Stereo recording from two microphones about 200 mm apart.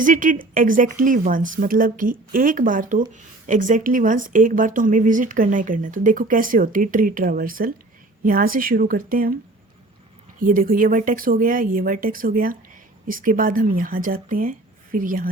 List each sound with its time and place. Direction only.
0.0 s a woman's voice: 40° right (ahead or behind)
10.4 s a woman's voice: 45° right (ahead or behind)